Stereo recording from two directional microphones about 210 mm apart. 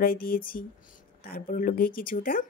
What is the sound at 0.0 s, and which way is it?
A woman's voice, 45° left (ahead or behind).